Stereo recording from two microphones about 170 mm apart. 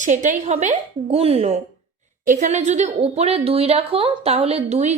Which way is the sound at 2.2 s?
50° right (ahead or behind).